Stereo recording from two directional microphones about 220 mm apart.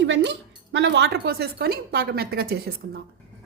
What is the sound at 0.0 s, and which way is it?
A woman's voice, 55° right (ahead or behind).